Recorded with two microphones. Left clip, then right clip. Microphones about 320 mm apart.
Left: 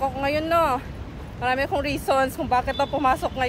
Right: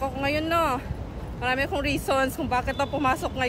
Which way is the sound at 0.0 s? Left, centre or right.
Centre.